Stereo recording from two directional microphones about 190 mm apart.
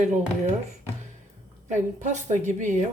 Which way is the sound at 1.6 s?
40° right (ahead or behind).